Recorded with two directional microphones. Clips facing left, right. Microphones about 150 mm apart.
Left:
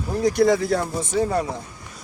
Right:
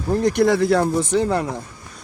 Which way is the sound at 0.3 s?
70° right (ahead or behind).